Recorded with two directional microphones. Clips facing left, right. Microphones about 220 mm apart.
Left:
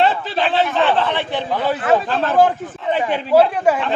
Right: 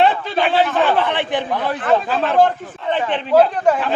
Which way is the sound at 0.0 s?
Centre (ahead or behind).